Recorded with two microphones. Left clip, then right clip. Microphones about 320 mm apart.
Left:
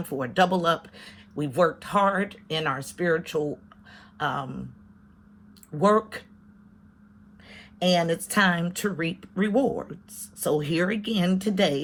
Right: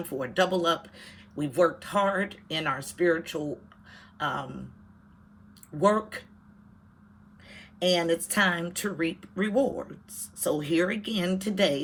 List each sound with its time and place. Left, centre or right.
0.1 s speech: centre
3.9 s a sound: centre
5.7 s speech: centre
7.5 s speech: left